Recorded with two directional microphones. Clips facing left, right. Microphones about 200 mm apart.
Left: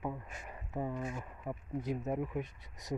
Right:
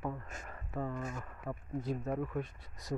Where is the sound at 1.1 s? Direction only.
15° left (ahead or behind).